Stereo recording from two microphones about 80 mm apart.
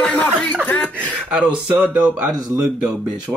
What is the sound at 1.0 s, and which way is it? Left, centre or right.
Speech, right.